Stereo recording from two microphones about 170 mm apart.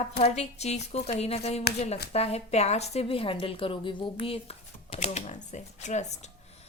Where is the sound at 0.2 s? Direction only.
40° left (ahead or behind).